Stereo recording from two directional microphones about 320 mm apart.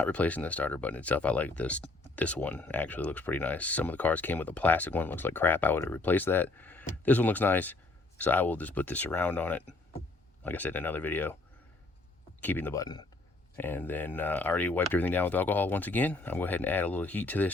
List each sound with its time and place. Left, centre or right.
0.0 s speech: centre
12.4 s a man's voice: centre